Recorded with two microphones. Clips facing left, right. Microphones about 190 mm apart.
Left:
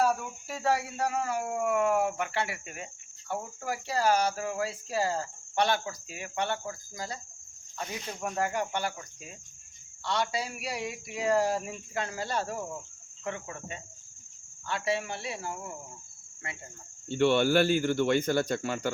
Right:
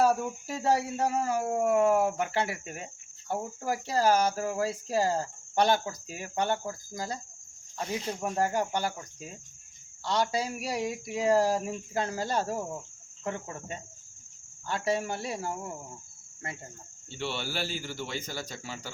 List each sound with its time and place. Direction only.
0.0 s speech: 40° right (ahead or behind)
1.0 s cricket: 35° right (ahead or behind)
8.2 s cricket: 35° right (ahead or behind)
10.0 s cricket: 40° right (ahead or behind)
14.7 s speech: 40° right (ahead or behind)
17.1 s speech: 55° left (ahead or behind)